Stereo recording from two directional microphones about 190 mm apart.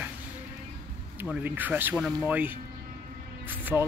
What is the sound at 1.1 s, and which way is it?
Speech, 10° right (ahead or behind).